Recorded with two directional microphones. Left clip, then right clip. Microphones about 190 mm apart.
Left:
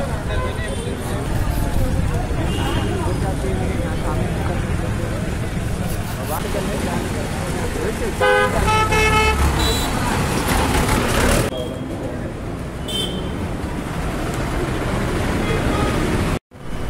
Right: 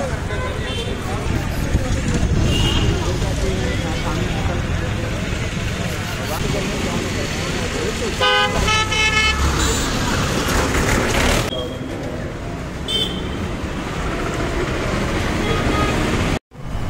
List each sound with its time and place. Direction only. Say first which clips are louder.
8.2 s vehicle: left 1 dB; 60° left (ahead or behind)